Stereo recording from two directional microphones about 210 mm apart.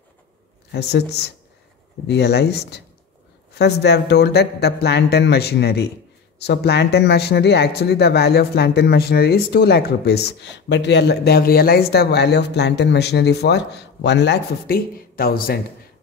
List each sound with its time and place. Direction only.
0.7 s speech: 55° left (ahead or behind)